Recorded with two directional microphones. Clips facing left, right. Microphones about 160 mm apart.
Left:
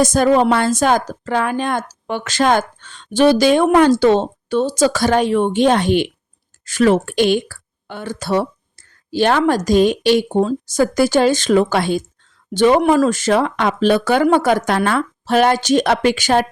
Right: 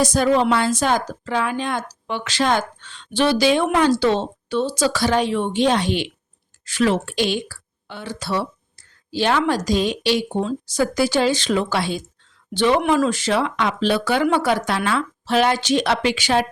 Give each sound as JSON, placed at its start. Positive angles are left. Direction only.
{"t": 0.0, "sound": "a woman's voice", "side_deg": 50}